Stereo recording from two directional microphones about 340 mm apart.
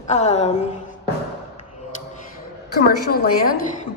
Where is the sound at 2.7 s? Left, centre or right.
Left.